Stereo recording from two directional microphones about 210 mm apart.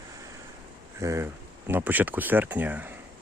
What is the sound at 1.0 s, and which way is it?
Speech, 15° right (ahead or behind).